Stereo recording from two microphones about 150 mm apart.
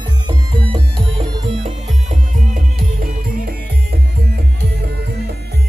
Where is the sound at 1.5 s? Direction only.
55° right (ahead or behind); by 3.6 s 70° right (ahead or behind).